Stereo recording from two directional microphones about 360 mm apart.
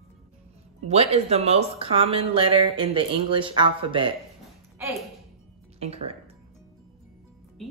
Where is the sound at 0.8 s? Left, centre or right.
Centre.